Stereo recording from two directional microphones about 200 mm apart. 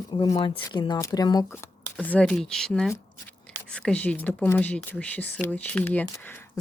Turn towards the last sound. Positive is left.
turn(degrees=10)  # may be behind; listen again after turning